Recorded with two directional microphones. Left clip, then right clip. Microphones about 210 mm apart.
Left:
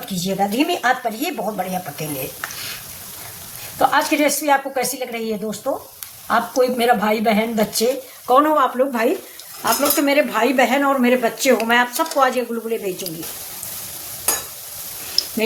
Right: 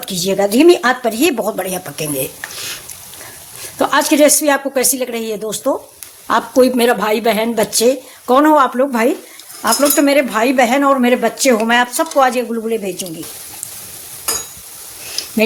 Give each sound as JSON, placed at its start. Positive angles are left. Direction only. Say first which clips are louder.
{"t": 0.0, "sound": "speech", "louder": "right 6 dB", "side_deg": -55}
{"t": 3.8, "sound": "speech", "louder": "right 5 dB", "side_deg": -45}